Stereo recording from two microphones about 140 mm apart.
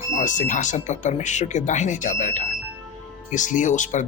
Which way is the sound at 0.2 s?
65° left (ahead or behind).